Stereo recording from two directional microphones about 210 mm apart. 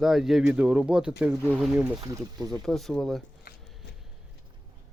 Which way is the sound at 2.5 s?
Centre (ahead or behind).